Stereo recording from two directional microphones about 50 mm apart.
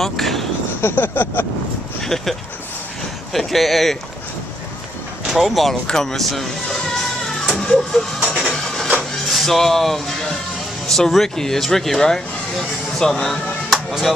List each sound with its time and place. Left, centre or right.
0.0 s a sound: centre
0.7 s a sound: left
3.3 s speech: centre
5.3 s speech: centre
5.9 s music: centre
8.2 s music: centre
9.3 s speech: centre